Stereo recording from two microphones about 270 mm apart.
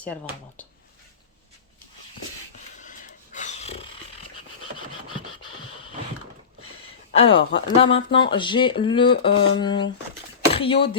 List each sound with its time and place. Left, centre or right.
0.0 s speech: centre
2.8 s dog: left
7.1 s speech: left